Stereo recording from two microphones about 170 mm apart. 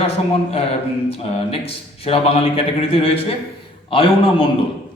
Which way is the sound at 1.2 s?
35° left (ahead or behind).